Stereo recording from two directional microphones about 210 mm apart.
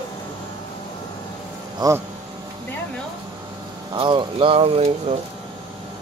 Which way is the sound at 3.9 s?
20° right (ahead or behind).